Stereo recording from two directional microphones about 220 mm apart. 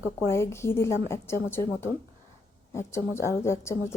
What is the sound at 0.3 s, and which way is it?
A woman's voice, 10° left (ahead or behind).